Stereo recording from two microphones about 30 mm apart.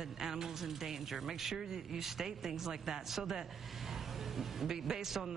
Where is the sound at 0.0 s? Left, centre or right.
Centre.